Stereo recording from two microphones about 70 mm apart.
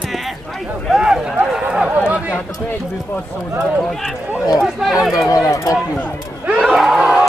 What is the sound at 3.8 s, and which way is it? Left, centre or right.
Speech, centre.